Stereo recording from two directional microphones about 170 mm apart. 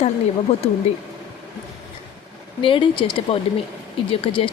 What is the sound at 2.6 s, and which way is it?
Speech, 30° left (ahead or behind).